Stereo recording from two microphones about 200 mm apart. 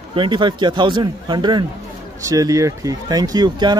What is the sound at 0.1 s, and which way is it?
Speech, 25° right (ahead or behind).